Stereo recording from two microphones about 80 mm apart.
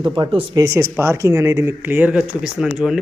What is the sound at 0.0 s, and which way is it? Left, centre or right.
Speech, right.